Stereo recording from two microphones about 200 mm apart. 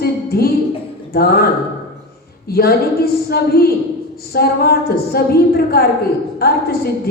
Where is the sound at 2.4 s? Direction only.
50° left (ahead or behind).